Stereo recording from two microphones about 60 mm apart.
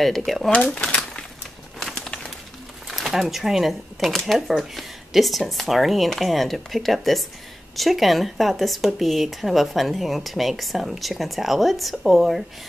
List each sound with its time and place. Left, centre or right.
0.0 s speech: centre
0.7 s crumpling: centre
1.8 s bird: centre
2.9 s speech: centre